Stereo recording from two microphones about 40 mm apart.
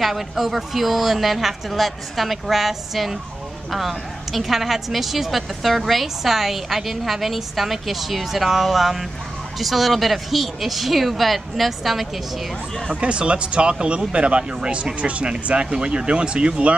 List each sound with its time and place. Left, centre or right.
0.0 s a woman's voice: centre
12.9 s speech: right